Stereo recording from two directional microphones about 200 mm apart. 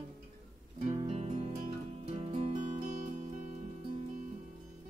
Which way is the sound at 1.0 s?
30° right (ahead or behind).